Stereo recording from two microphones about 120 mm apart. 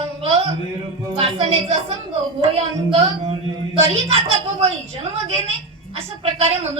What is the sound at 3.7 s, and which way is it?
Speech, 55° right (ahead or behind).